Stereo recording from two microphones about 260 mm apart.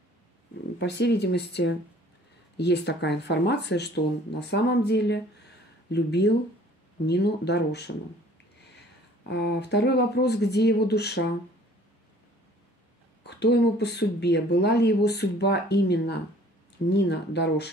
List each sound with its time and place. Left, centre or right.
0.7 s speech: left
9.3 s speech: left
13.2 s speech: left